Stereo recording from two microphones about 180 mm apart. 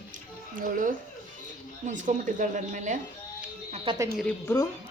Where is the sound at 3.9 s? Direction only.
30° right (ahead or behind).